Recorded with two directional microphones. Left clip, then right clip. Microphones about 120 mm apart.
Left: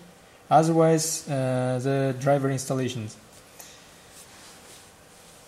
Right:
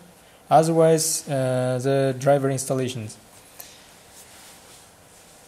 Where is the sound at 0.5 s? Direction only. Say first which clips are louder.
Right 3 dB; 20° right (ahead or behind).